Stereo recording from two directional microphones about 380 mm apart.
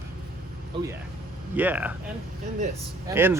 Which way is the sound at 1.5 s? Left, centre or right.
Centre.